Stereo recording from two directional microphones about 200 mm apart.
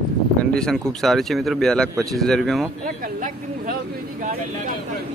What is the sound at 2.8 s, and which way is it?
Speech, 45° right (ahead or behind).